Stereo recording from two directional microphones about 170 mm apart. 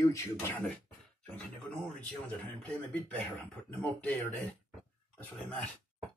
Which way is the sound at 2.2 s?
10° left (ahead or behind).